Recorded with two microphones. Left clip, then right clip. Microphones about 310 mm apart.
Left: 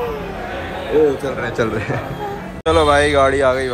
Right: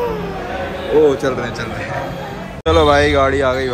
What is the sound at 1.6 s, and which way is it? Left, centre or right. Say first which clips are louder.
Speech: left 4 dB; centre.